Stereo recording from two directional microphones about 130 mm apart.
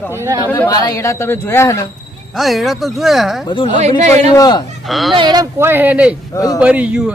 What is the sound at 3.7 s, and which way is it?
Speech, 60° right (ahead or behind).